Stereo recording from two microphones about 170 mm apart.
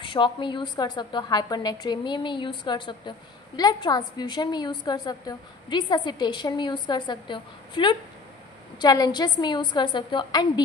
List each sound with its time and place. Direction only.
0.0 s a woman's voice: 30° left (ahead or behind)